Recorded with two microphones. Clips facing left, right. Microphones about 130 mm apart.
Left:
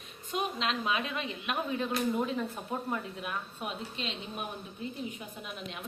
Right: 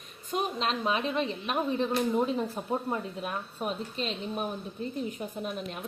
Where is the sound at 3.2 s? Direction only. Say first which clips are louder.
Right 3 dB; 40° right (ahead or behind).